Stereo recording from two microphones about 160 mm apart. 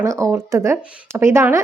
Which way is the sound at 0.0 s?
20° right (ahead or behind).